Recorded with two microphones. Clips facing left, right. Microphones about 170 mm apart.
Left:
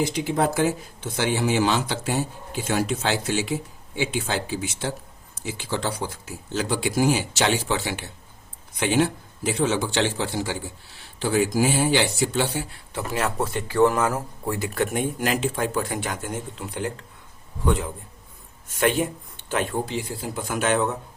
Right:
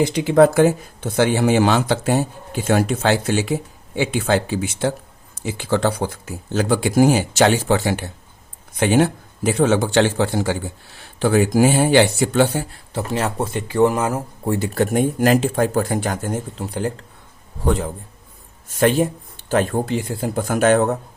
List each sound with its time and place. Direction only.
0.0 s speech: 70° right (ahead or behind); by 12.6 s 50° right (ahead or behind)
12.9 s speech: 30° right (ahead or behind)
14.5 s speech: 35° right (ahead or behind)